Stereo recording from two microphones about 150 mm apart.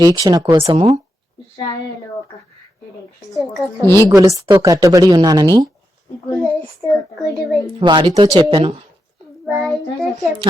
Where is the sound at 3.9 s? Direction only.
15° left (ahead or behind).